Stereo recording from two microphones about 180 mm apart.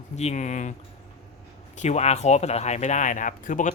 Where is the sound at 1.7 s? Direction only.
40° left (ahead or behind).